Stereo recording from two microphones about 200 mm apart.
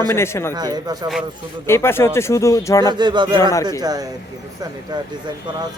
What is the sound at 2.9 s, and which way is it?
Speech, 20° right (ahead or behind).